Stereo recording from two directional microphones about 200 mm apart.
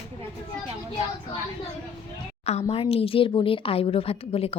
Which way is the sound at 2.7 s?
30° left (ahead or behind).